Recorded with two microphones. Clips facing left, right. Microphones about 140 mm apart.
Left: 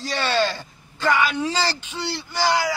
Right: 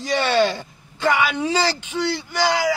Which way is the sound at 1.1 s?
Centre (ahead or behind).